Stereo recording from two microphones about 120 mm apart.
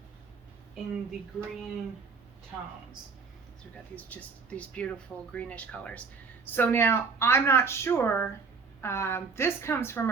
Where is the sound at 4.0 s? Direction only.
15° left (ahead or behind).